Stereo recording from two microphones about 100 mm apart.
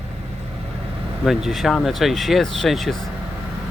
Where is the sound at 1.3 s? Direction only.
Centre (ahead or behind).